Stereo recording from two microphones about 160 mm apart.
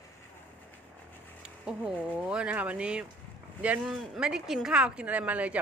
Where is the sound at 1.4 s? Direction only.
10° right (ahead or behind).